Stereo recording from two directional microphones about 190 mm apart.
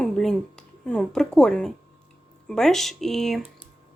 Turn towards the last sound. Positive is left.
turn(degrees=0)  # may be behind; listen again after turning